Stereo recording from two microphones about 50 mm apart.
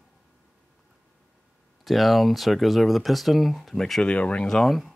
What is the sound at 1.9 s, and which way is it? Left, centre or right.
Speech, centre.